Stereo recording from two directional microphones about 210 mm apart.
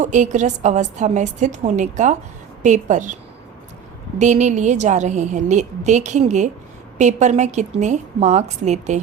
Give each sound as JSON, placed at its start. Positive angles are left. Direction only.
{"t": 0.0, "sound": "a woman's voice", "side_deg": -35}
{"t": 4.2, "sound": "a woman's voice", "side_deg": -35}